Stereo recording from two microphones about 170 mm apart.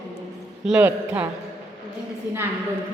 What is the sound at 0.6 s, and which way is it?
Speech, 10° right (ahead or behind).